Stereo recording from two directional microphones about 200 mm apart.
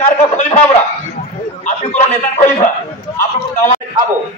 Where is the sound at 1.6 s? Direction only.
35° left (ahead or behind).